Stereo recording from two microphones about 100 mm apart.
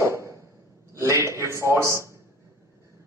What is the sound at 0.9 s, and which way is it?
A man's voice, 30° right (ahead or behind).